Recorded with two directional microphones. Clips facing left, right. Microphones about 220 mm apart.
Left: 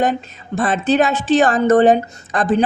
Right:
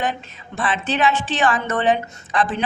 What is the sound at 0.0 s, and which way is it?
A woman's voice, 40° left (ahead or behind).